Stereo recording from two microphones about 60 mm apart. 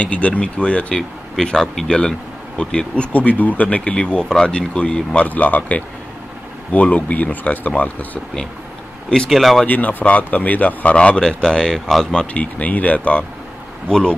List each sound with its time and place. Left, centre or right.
0.0 s speech: left
1.3 s speech: centre; by 8.2 s left
9.3 s speech: centre
9.7 s speech: left
11.0 s speech: centre
12.4 s speech: left
13.8 s speech: centre